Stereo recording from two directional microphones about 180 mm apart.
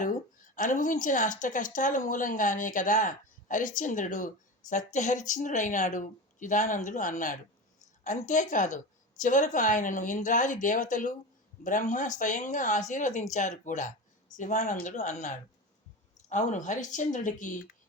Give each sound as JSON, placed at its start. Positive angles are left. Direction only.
{"t": 0.5, "sound": "speech", "side_deg": 45}